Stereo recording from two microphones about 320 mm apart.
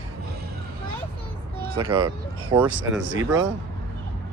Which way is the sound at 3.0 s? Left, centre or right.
Right.